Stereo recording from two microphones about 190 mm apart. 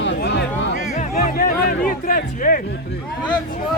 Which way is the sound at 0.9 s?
40° left (ahead or behind).